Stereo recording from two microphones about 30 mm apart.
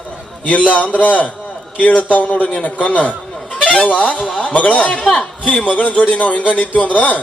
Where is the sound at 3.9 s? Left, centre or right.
Left.